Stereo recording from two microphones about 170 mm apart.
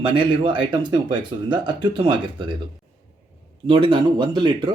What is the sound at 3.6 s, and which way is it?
Speech, 25° right (ahead or behind).